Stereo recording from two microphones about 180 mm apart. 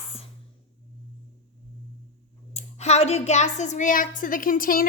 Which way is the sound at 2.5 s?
35° left (ahead or behind).